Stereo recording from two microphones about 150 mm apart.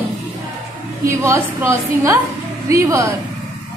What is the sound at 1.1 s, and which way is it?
A woman's voice, 20° right (ahead or behind).